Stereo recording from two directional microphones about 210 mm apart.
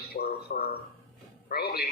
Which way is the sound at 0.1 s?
45° left (ahead or behind).